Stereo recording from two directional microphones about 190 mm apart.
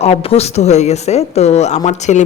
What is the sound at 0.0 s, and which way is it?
A woman's voice, 30° left (ahead or behind).